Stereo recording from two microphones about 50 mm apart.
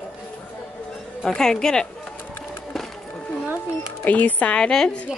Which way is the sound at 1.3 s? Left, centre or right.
Centre.